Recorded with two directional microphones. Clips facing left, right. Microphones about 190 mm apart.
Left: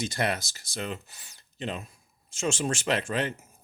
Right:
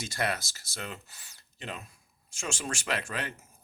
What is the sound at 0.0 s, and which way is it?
Speech, 20° left (ahead or behind).